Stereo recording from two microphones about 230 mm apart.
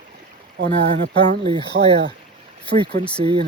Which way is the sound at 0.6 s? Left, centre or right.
Right.